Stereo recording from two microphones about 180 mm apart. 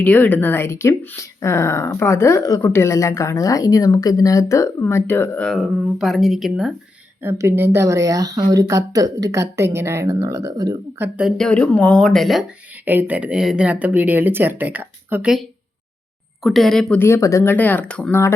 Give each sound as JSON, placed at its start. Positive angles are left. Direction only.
{"t": 0.0, "sound": "speech", "side_deg": 10}
{"t": 7.2, "sound": "a woman's voice", "side_deg": -15}
{"t": 17.0, "sound": "speech", "side_deg": 15}